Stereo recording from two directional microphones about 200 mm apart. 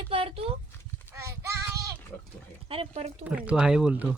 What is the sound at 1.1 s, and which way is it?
Child singing, 15° right (ahead or behind).